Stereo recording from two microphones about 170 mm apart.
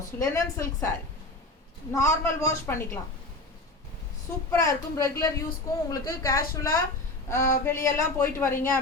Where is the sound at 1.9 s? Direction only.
15° left (ahead or behind).